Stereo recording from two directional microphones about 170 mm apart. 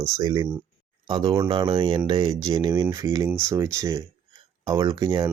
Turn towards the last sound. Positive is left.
turn(degrees=-25)  # may be behind; listen again after turning